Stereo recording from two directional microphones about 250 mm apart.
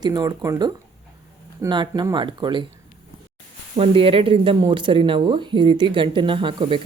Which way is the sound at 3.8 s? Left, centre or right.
Right.